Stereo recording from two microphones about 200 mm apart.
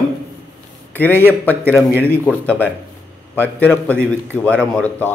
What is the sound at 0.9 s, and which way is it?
A man's voice, 10° left (ahead or behind).